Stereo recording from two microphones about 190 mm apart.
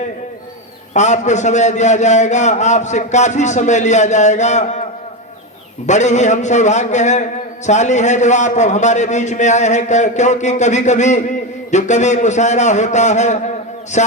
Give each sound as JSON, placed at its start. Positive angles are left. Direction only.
{"t": 0.9, "sound": "a man's voice", "side_deg": 40}
{"t": 5.8, "sound": "a man's voice", "side_deg": 40}